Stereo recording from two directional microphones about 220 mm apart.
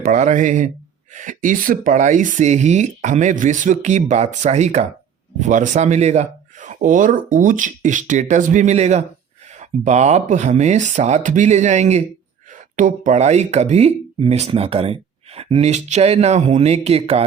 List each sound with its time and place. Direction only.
0.0 s speech: 35° right (ahead or behind)